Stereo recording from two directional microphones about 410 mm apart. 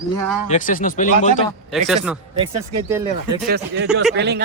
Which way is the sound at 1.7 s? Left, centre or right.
Centre.